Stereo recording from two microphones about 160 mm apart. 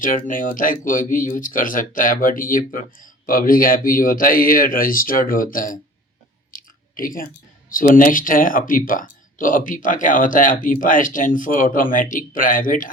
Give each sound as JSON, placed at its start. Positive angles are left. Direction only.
{"t": 0.0, "sound": "speech", "side_deg": 55}
{"t": 6.5, "sound": "chewing", "side_deg": 60}
{"t": 7.7, "sound": "speech", "side_deg": 60}